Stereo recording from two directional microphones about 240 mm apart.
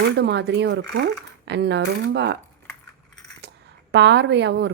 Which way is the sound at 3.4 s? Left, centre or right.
Right.